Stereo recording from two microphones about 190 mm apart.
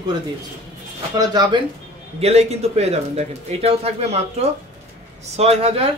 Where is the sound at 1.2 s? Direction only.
20° right (ahead or behind).